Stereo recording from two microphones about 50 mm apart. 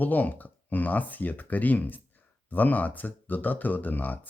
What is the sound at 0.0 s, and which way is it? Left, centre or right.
Speech, left.